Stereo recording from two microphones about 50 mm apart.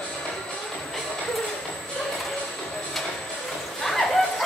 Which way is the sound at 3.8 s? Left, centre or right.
Centre.